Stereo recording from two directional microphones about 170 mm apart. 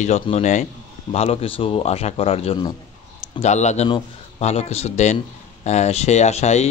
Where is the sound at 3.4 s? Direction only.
40° left (ahead or behind).